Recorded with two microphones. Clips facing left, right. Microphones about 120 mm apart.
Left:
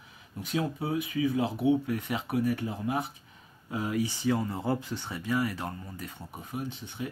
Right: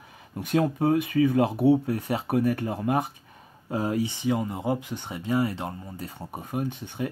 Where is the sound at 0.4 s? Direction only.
55° right (ahead or behind).